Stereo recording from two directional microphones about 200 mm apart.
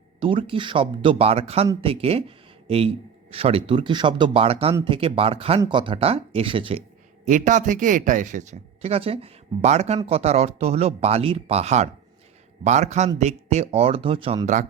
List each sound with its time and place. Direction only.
0.2 s a man's voice: 25° right (ahead or behind)
7.3 s a man's voice: 40° right (ahead or behind)